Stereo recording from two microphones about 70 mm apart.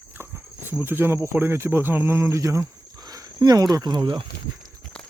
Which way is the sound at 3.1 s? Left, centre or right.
Right.